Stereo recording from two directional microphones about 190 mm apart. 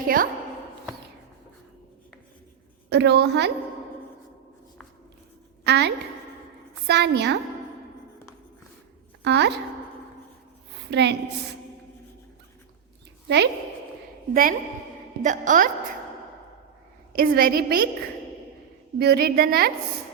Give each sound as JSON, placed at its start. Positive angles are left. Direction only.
{"t": 0.0, "sound": "speech", "side_deg": -50}
{"t": 2.9, "sound": "a woman's voice", "side_deg": -65}
{"t": 5.6, "sound": "a woman's voice", "side_deg": -60}
{"t": 9.2, "sound": "a woman's voice", "side_deg": -65}
{"t": 10.9, "sound": "a woman's voice", "side_deg": -65}
{"t": 13.2, "sound": "speech", "side_deg": -65}
{"t": 15.2, "sound": "a woman's voice", "side_deg": -40}
{"t": 17.2, "sound": "a woman's voice", "side_deg": -50}
{"t": 18.9, "sound": "a woman's voice", "side_deg": -55}